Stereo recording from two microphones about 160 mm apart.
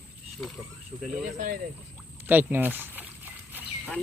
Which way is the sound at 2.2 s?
10° right (ahead or behind).